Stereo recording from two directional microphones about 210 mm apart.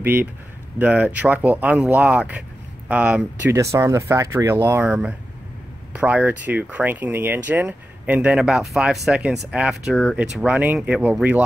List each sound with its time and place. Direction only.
0.0 s speech: 10° right (ahead or behind)